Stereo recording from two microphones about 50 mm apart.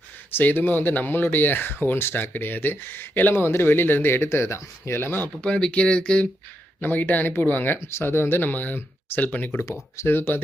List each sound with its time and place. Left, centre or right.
0.3 s speech: left
4.9 s speech: left
5.5 s speech: centre
6.8 s speech: left
7.9 s speech: left
10.1 s speech: left